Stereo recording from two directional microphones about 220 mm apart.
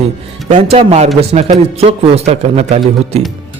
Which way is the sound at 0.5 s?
30° right (ahead or behind).